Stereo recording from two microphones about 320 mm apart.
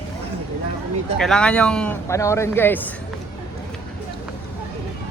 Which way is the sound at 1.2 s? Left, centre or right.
Centre.